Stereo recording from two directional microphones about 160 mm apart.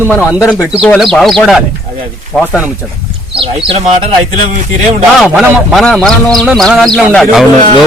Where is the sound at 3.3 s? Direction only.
35° right (ahead or behind).